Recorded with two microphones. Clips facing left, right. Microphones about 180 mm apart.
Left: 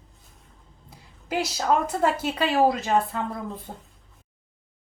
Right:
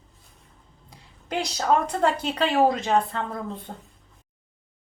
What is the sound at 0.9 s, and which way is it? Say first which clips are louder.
A woman's voice: left 1 dB; 5° left (ahead or behind).